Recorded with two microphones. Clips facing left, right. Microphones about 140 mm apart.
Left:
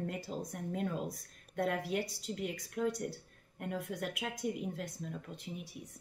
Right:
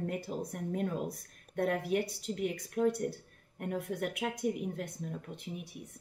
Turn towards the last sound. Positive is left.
turn(degrees=-55)  # may be behind; listen again after turning